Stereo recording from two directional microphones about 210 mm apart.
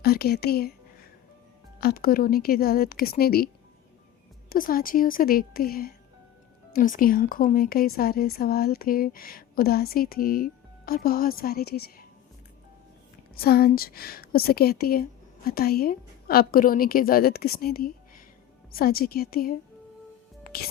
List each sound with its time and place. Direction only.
0.0 s a woman's voice: 50° left (ahead or behind)
1.8 s a woman's voice: 45° left (ahead or behind)
13.3 s a woman's voice: 45° left (ahead or behind)
20.5 s a woman's voice: 45° left (ahead or behind)